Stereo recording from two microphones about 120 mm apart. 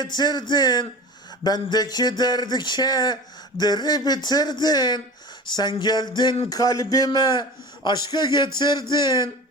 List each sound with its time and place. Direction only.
0.0 s speech: 35° left (ahead or behind)